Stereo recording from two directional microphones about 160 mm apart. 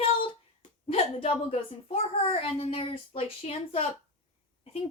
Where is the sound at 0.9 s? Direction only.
40° left (ahead or behind).